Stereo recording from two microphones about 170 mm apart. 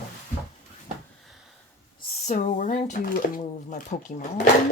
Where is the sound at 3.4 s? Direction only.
45° left (ahead or behind).